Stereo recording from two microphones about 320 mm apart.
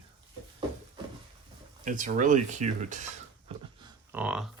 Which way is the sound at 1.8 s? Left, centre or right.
Right.